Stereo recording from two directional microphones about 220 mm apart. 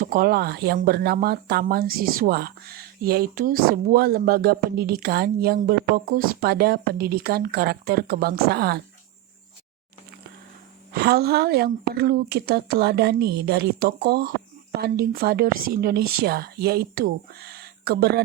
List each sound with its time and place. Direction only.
0.0 s speech: 40° right (ahead or behind)
10.9 s speech: 45° right (ahead or behind)